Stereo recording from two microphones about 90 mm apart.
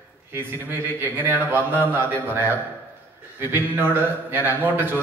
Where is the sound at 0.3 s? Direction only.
20° right (ahead or behind).